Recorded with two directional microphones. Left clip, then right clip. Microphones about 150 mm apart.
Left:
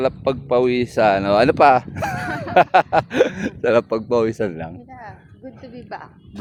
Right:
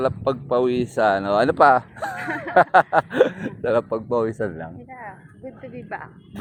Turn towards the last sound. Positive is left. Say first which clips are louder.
# right 1 dB
turn(degrees=20)  # may be behind; listen again after turning